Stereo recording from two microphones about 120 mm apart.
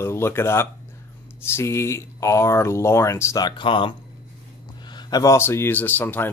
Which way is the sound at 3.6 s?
45° left (ahead or behind).